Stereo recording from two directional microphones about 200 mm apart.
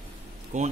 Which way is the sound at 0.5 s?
40° right (ahead or behind).